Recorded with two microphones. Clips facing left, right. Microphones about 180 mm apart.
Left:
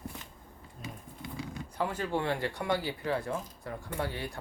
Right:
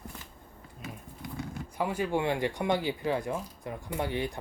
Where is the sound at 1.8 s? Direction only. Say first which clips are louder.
Right 3 dB; 10° right (ahead or behind).